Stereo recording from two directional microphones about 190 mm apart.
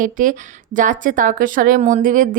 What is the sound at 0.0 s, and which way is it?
A woman's voice, 45° right (ahead or behind).